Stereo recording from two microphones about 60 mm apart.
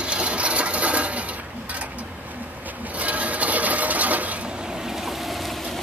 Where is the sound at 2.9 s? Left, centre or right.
Right.